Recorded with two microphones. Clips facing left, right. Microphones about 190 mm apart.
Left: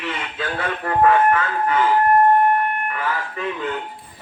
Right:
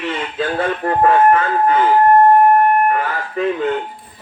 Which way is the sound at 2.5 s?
45° right (ahead or behind).